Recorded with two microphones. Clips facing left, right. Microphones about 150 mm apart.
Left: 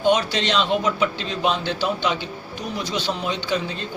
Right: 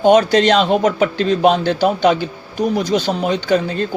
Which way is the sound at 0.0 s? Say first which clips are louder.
Right 9 dB; 45° right (ahead or behind).